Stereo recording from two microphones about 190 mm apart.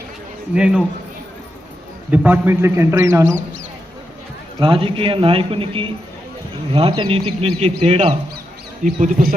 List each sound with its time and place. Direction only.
0.5 s a man's voice: 5° right (ahead or behind)
2.0 s a man's voice: 10° right (ahead or behind)
4.6 s speech: 30° right (ahead or behind)
8.8 s speech: 45° right (ahead or behind)